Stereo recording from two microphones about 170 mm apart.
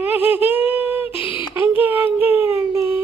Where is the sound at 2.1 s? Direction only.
10° right (ahead or behind).